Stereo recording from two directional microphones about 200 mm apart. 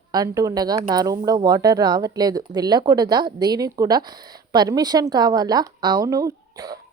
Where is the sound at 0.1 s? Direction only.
20° right (ahead or behind).